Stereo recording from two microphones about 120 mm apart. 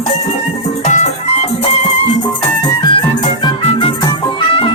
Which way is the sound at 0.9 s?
70° left (ahead or behind).